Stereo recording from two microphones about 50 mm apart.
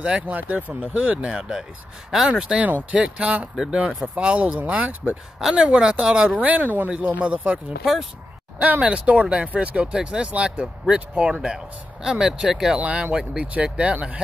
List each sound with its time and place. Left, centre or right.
0.0 s speech: right
0.4 s speech: right
0.9 s speech: right
4.6 s speech: right
5.5 s speech: centre
6.3 s speech: right
7.0 s speech: right; by 12.7 s centre
12.7 s speech: right
13.1 s speech: centre